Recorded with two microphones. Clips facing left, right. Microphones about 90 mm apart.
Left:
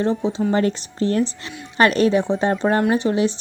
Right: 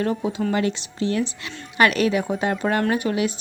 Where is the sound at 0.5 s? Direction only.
40° left (ahead or behind).